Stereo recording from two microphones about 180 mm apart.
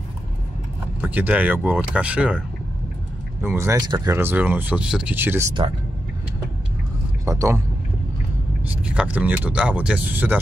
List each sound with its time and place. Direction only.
1.0 s speech: 10° right (ahead or behind)
3.4 s speech: 15° right (ahead or behind)
7.2 s speech: 15° right (ahead or behind)
8.8 s speech: 5° right (ahead or behind)